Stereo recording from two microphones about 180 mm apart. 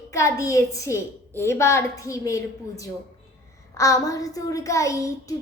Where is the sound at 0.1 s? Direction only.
15° left (ahead or behind).